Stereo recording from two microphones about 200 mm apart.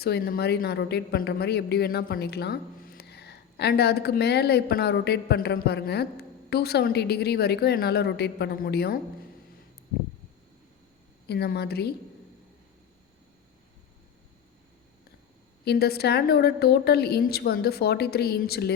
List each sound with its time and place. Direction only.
0.0 s a woman's voice: 55° left (ahead or behind)
11.3 s a woman's voice: 55° left (ahead or behind)
15.6 s a woman's voice: 50° left (ahead or behind)